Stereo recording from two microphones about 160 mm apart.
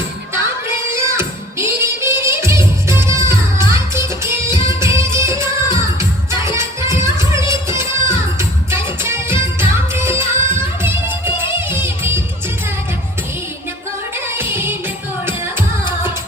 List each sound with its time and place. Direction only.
0.9 s music: 15° right (ahead or behind)
14.3 s music: 15° right (ahead or behind)